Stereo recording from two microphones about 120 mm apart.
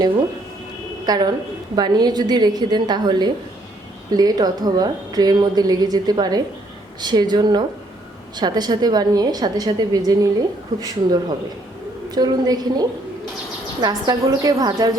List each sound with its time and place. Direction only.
1.0 s a woman's voice: 35° right (ahead or behind)
13.8 s a woman's voice: 30° right (ahead or behind)